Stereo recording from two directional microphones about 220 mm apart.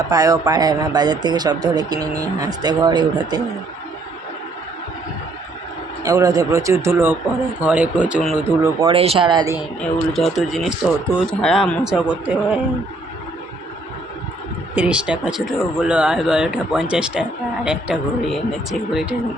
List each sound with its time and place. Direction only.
0.1 s speech: 15° right (ahead or behind)
6.0 s speech: 15° right (ahead or behind)
8.6 s speech: 20° right (ahead or behind)
9.8 s speech: centre (ahead or behind)
14.8 s speech: 5° right (ahead or behind)